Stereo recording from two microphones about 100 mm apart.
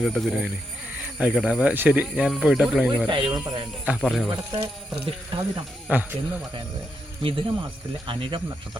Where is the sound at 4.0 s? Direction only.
Centre (ahead or behind).